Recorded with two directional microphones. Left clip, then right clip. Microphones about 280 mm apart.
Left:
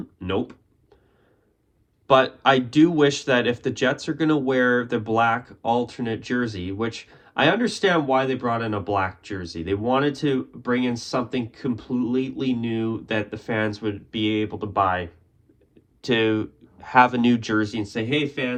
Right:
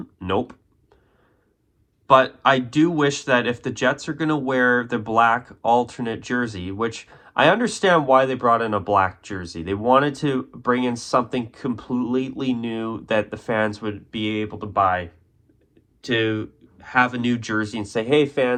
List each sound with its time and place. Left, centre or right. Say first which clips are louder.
0.0 s a sound: right 3 dB; centre
2.0 s speech: right 2 dB; centre
16.0 s speech: left 1 dB; left; by 18.3 s centre